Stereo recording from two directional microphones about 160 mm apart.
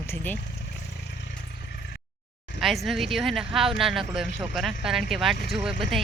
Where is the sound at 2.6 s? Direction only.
Centre (ahead or behind).